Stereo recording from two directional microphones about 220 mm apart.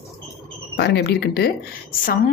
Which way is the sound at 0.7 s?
45° left (ahead or behind).